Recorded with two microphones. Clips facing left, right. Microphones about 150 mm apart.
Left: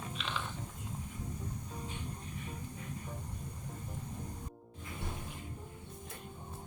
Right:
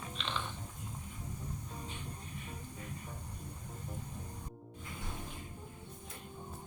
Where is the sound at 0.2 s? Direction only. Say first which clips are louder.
Right 1 dB; 5° left (ahead or behind).